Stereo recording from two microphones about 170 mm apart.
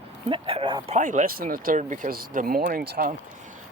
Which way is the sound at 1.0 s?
50° right (ahead or behind).